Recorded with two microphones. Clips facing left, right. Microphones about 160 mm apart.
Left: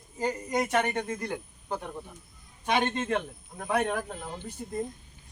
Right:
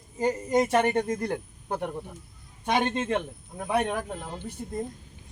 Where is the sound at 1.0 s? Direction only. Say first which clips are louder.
Right 5 dB; 40° right (ahead or behind).